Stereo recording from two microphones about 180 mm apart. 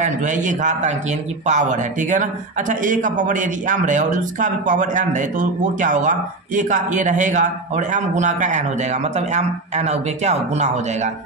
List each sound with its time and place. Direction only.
0.0 s speech: 45° right (ahead or behind)